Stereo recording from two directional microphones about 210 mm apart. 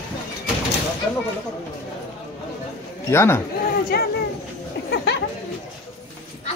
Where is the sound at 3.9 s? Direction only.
50° left (ahead or behind).